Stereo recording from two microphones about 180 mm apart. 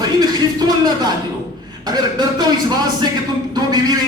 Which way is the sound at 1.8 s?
25° right (ahead or behind).